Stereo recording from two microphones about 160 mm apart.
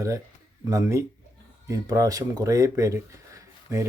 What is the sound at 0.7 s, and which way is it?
Speech, 20° right (ahead or behind).